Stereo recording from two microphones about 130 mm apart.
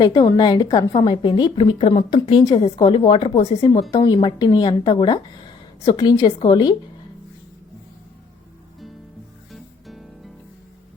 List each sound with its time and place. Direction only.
0.0 s speech: 30° left (ahead or behind); by 3.7 s 45° left (ahead or behind)
3.9 s speech: 35° left (ahead or behind)
9.5 s music: centre (ahead or behind)